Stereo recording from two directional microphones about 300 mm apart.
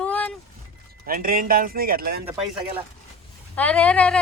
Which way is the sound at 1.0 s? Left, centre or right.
Right.